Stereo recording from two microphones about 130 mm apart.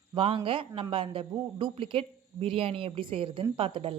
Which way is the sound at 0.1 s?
45° right (ahead or behind).